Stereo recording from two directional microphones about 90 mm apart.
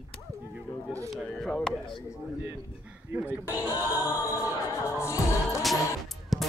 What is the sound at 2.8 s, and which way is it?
Speech, 15° right (ahead or behind).